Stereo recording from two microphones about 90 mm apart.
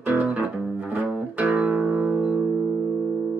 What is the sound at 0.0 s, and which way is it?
Music, 15° right (ahead or behind).